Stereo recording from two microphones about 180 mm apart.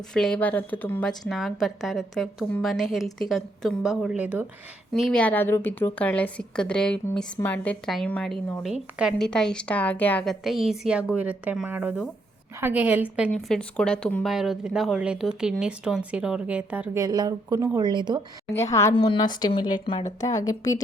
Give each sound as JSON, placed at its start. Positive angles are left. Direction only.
{"t": 0.1, "sound": "a woman's voice", "side_deg": 5}
{"t": 18.7, "sound": "a woman's voice", "side_deg": 15}